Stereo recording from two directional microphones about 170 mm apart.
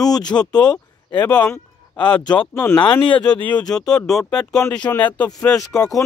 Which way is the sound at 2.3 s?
25° left (ahead or behind).